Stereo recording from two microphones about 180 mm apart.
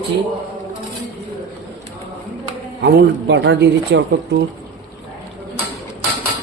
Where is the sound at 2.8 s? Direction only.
65° right (ahead or behind).